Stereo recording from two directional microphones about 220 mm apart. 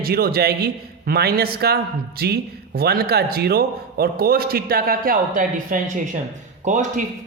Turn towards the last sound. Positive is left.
turn(degrees=-35)  # may be behind; listen again after turning